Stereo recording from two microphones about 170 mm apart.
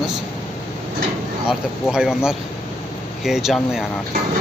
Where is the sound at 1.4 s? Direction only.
5° right (ahead or behind).